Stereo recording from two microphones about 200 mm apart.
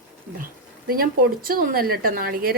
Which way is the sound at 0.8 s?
45° right (ahead or behind).